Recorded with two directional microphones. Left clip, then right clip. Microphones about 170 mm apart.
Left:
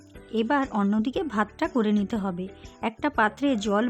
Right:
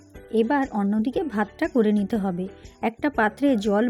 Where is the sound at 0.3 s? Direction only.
Centre (ahead or behind).